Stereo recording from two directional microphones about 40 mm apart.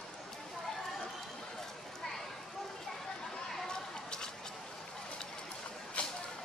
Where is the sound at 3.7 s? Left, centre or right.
Centre.